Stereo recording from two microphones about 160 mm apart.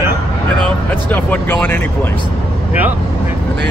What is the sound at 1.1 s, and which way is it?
Speech, 10° left (ahead or behind).